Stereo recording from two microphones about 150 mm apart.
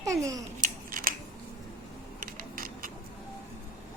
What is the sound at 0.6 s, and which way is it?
Scissors, 65° right (ahead or behind).